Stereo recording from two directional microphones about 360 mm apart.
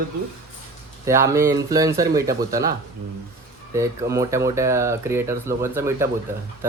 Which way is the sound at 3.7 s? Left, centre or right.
Centre.